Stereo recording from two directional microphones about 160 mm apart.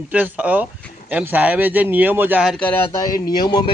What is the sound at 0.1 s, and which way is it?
Speech, 10° right (ahead or behind).